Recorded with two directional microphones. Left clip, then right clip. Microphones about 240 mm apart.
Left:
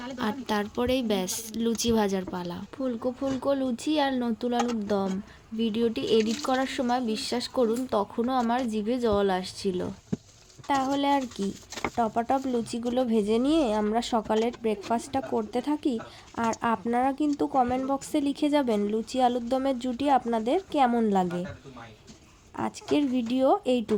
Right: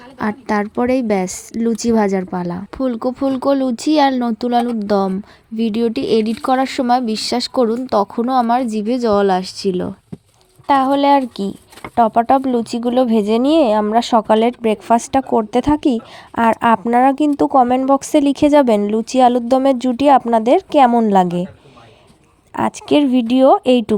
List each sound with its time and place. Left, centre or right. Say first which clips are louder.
0.2 s speech: right 11 dB; right
22.5 s speech: right 12 dB; right